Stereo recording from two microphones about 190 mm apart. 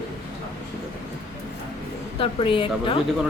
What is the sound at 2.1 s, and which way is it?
Speech, 25° left (ahead or behind).